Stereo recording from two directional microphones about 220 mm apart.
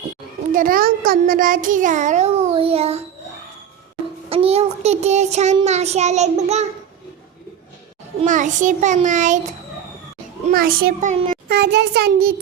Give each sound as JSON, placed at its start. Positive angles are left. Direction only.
{"t": 0.5, "sound": "a child's voice", "side_deg": -40}
{"t": 4.3, "sound": "child singing", "side_deg": -25}
{"t": 8.2, "sound": "child singing", "side_deg": -35}
{"t": 10.5, "sound": "a child's voice", "side_deg": -40}